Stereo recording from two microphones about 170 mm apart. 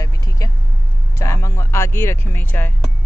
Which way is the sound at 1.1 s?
15° left (ahead or behind).